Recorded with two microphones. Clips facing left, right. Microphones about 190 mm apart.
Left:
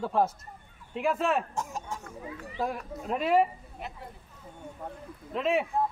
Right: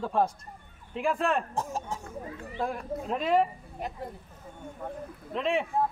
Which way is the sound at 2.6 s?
5° left (ahead or behind).